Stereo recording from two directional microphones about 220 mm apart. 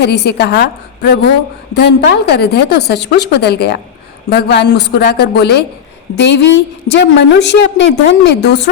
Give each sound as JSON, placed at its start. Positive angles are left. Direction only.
{"t": 0.0, "sound": "a woman's voice", "side_deg": 50}